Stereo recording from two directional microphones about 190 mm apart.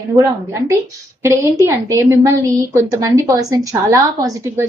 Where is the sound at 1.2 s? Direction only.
15° right (ahead or behind).